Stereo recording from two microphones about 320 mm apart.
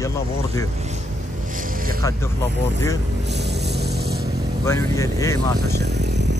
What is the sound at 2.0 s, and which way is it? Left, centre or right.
Speech, centre.